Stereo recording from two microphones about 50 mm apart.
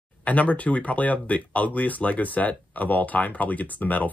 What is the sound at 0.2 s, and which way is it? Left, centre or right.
Speech, left.